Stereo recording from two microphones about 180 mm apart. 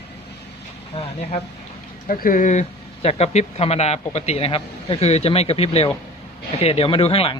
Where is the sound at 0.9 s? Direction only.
35° left (ahead or behind).